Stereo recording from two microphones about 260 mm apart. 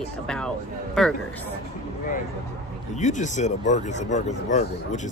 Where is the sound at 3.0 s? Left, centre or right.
Left.